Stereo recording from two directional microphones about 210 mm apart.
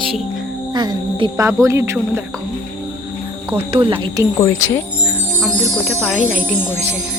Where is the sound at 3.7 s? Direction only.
25° right (ahead or behind).